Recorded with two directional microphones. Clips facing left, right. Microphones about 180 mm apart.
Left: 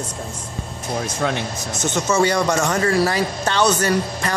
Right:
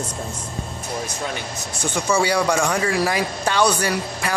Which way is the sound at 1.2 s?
70° left (ahead or behind).